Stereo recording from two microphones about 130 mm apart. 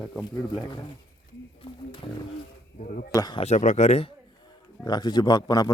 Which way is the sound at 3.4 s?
65° left (ahead or behind).